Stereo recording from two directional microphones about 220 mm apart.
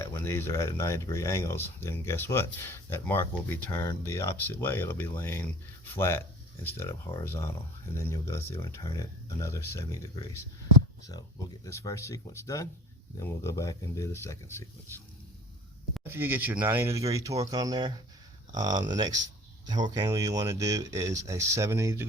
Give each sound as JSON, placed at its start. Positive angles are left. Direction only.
{"t": 0.0, "sound": "speech", "side_deg": 10}
{"t": 11.6, "sound": "speech", "side_deg": 15}
{"t": 16.0, "sound": "speech", "side_deg": -10}